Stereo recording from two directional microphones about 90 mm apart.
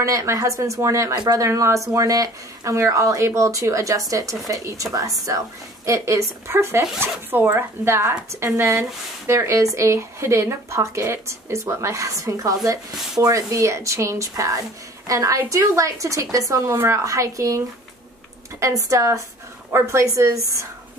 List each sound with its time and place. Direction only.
0.0 s speech: 35° right (ahead or behind)